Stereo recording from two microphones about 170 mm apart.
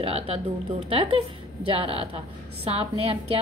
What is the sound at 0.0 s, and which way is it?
A woman's voice, 35° right (ahead or behind).